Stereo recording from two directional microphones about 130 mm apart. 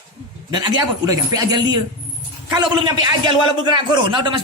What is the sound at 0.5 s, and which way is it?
Speech, 30° right (ahead or behind).